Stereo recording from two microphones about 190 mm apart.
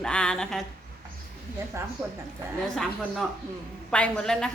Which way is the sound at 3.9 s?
5° left (ahead or behind).